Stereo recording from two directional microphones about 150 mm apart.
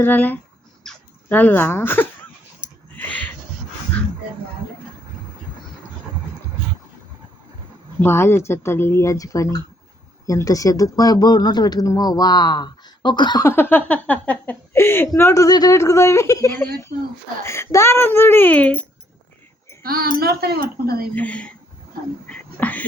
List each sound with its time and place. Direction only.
0.0 s speech: 10° left (ahead or behind)
8.0 s speech: 15° left (ahead or behind)
13.5 s speech: 15° left (ahead or behind)
19.8 s a child's voice: 85° right
21.2 s speech: 10° left (ahead or behind)